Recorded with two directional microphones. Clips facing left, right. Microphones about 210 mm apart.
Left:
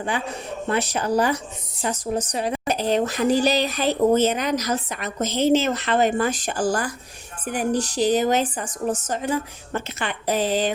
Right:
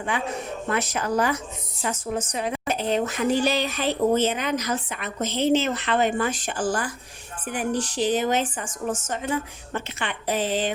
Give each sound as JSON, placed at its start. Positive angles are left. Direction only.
{"t": 0.7, "sound": "speech", "side_deg": 30}